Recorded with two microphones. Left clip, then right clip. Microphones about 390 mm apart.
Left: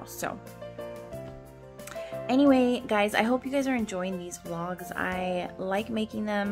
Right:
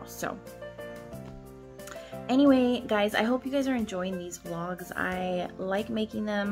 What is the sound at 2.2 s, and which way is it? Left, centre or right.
Speech, centre.